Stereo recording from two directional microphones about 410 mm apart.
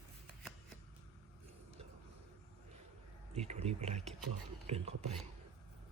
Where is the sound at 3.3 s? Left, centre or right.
Centre.